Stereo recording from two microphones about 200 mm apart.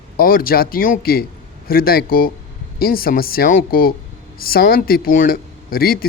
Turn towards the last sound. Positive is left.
turn(degrees=50)  # may be behind; listen again after turning